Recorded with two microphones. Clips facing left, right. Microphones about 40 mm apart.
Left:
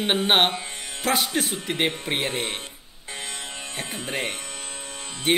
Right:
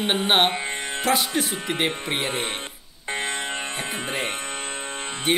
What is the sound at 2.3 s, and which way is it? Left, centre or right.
Speech, centre.